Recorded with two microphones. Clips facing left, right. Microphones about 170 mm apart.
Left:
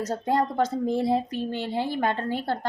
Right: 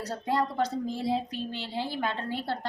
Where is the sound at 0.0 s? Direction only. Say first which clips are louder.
Left 4 dB; 45° left (ahead or behind).